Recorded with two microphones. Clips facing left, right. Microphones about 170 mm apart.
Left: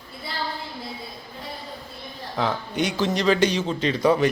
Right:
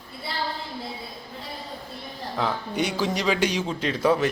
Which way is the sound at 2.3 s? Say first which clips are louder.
Left 1 dB; 5° right (ahead or behind).